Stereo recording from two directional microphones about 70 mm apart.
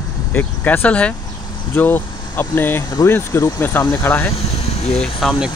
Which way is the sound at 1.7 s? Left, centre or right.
Left.